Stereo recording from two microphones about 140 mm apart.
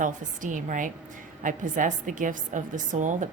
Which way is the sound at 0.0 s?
70° right (ahead or behind).